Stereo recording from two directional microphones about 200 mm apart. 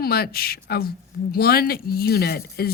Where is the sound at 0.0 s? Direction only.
50° left (ahead or behind).